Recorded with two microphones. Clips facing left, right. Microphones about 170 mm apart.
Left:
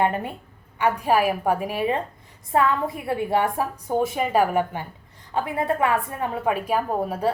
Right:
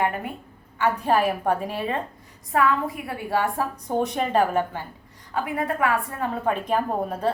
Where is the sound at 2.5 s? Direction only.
25° left (ahead or behind).